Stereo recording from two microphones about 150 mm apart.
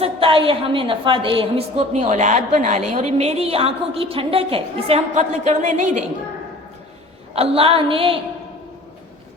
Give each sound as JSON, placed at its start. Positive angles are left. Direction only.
{"t": 0.0, "sound": "a woman's voice", "side_deg": -35}
{"t": 1.8, "sound": "a woman's voice", "side_deg": -50}
{"t": 7.3, "sound": "a woman's voice", "side_deg": -40}